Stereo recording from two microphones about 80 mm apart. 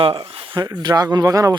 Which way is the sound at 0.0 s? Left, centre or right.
Right.